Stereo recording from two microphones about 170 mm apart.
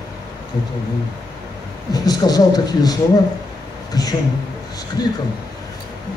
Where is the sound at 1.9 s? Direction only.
20° left (ahead or behind).